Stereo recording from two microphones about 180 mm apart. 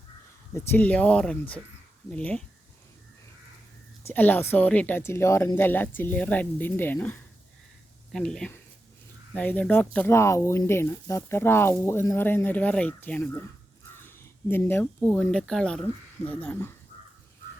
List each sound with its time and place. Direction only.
0.5 s speech: 10° left (ahead or behind)
4.0 s speech: 10° left (ahead or behind)